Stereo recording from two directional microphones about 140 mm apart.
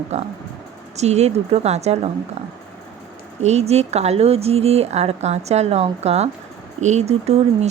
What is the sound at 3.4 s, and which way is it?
Speech, 50° right (ahead or behind).